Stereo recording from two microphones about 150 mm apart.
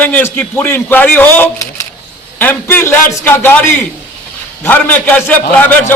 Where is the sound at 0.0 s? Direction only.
15° left (ahead or behind).